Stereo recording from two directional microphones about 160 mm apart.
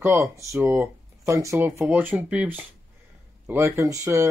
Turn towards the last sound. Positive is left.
turn(degrees=-20)  # may be behind; listen again after turning